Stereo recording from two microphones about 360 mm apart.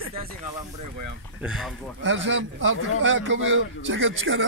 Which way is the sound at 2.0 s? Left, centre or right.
Right.